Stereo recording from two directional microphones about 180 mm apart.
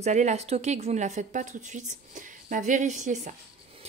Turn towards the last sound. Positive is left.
turn(degrees=-40)  # may be behind; listen again after turning